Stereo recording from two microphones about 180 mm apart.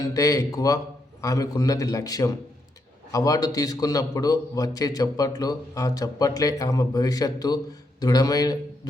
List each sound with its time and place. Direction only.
0.0 s a man's voice: 20° left (ahead or behind)